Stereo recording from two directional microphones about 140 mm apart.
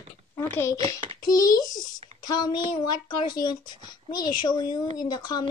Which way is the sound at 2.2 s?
30° left (ahead or behind).